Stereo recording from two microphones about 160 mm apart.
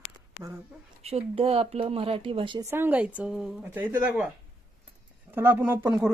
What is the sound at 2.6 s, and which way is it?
Speech, 15° right (ahead or behind).